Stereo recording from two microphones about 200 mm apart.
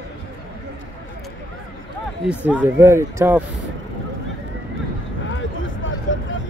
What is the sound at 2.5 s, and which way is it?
Speech, 10° right (ahead or behind).